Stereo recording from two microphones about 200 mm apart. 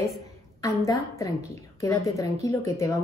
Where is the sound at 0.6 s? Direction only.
15° left (ahead or behind).